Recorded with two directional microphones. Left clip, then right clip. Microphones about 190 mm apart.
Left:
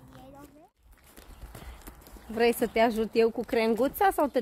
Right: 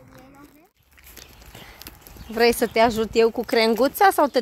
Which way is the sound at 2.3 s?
20° right (ahead or behind).